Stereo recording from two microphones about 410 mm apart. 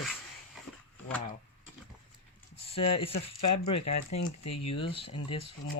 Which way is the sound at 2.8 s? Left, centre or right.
Centre.